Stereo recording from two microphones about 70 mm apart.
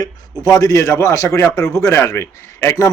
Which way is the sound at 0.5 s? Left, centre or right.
Left.